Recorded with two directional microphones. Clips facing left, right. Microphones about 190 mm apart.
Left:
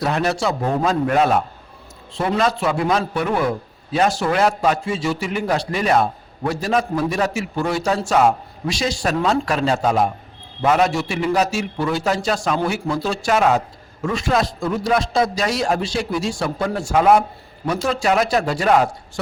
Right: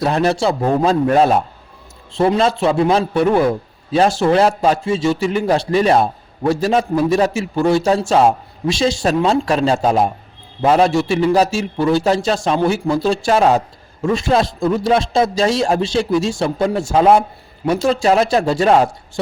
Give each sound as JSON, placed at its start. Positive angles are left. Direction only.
{"t": 0.0, "sound": "a man's voice", "side_deg": -30}
{"t": 2.4, "sound": "a man's voice", "side_deg": -25}